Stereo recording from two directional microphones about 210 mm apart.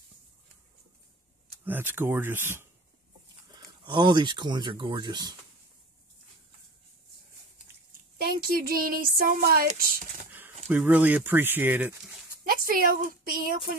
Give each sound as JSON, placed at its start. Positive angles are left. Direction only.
{"t": 1.6, "sound": "speech", "side_deg": -10}
{"t": 3.8, "sound": "speech", "side_deg": -20}
{"t": 8.2, "sound": "a sound", "side_deg": -45}
{"t": 9.7, "sound": "speech", "side_deg": -40}
{"t": 10.7, "sound": "speech", "side_deg": -5}
{"t": 12.4, "sound": "a woman's voice", "side_deg": -45}